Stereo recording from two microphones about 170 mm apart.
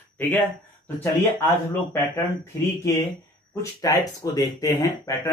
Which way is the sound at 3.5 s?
20° left (ahead or behind).